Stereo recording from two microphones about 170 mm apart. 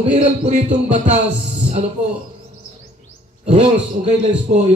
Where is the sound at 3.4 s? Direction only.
40° right (ahead or behind).